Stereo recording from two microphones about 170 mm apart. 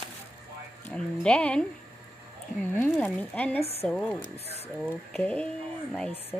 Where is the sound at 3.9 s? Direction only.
5° left (ahead or behind).